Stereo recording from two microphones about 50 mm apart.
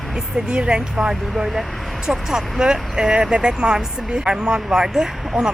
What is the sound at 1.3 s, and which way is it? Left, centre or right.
Speech, centre.